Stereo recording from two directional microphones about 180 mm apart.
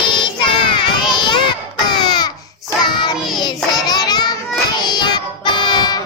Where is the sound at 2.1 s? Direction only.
25° left (ahead or behind).